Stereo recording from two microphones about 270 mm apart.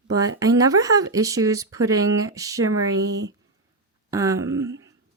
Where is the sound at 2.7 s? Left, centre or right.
Right.